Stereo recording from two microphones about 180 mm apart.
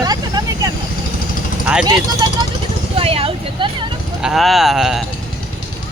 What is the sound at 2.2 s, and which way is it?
Speech, 25° right (ahead or behind).